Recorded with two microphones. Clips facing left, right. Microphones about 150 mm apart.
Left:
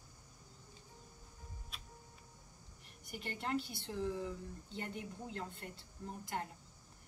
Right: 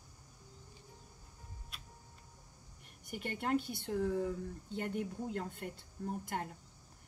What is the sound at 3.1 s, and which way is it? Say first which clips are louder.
Speech: right 4 dB; 50° right (ahead or behind).